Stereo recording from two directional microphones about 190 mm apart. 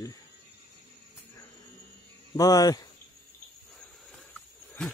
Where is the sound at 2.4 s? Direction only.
20° left (ahead or behind).